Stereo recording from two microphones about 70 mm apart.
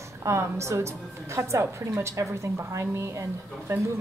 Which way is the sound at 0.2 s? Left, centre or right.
Right.